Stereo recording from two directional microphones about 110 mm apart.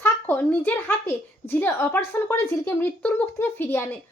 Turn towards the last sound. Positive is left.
turn(degrees=20)  # may be behind; listen again after turning